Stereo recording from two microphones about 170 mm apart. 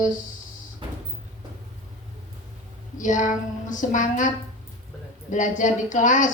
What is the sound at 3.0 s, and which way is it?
A woman's voice, 50° left (ahead or behind).